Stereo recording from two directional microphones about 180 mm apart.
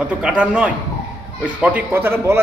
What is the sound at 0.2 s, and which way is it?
A man's voice, 5° right (ahead or behind).